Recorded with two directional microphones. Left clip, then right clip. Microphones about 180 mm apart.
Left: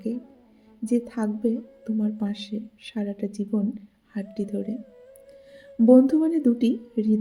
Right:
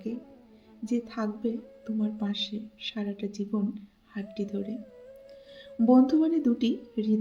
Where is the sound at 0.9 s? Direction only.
40° left (ahead or behind).